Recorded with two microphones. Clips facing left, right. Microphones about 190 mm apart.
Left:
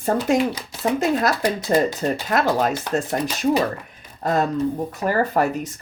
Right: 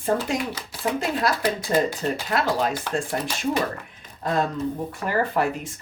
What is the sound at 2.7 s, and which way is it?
Speech, 25° left (ahead or behind).